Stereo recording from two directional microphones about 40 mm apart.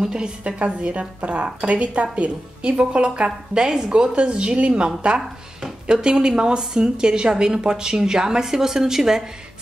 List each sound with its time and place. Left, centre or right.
0.0 s a woman's voice: centre
0.8 s a woman's voice: right; by 9.2 s centre